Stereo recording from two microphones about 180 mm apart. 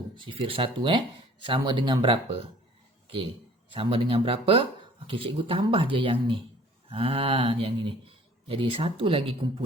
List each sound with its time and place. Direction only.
0.3 s speech: 30° right (ahead or behind)
3.7 s speech: 30° right (ahead or behind)